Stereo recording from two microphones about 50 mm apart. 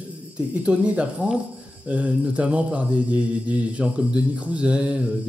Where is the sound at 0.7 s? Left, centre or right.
Right.